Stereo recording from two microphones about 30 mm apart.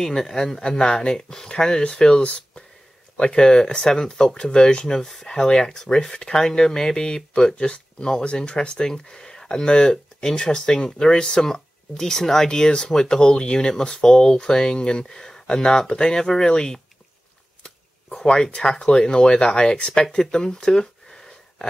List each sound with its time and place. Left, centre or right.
0.0 s speech: centre
0.7 s speech: left
2.2 s speech: left
3.2 s speech: left
4.8 s speech: centre
7.5 s speech: left
8.4 s speech: left
11.4 s speech: centre
12.4 s speech: left
18.2 s speech: left